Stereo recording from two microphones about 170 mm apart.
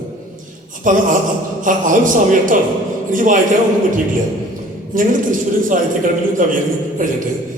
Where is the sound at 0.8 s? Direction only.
50° right (ahead or behind).